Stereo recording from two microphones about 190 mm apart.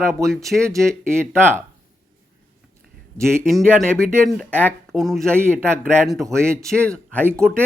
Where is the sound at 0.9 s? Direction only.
15° right (ahead or behind).